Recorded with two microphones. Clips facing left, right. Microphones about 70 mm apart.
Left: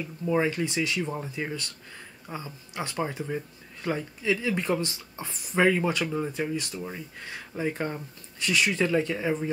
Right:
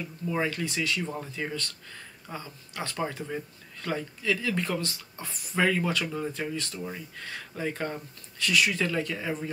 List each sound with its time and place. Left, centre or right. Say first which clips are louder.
0.3 s speech: left 4 dB; centre